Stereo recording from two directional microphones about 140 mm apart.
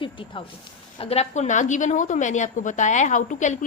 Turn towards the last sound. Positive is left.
turn(degrees=60)  # may be behind; listen again after turning